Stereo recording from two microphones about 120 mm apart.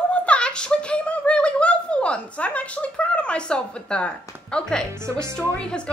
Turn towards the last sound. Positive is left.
turn(degrees=10)  # may be behind; listen again after turning